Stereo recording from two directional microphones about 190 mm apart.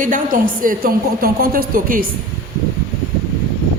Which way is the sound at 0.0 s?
45° right (ahead or behind).